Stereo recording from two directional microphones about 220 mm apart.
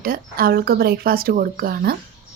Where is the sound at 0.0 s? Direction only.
40° right (ahead or behind).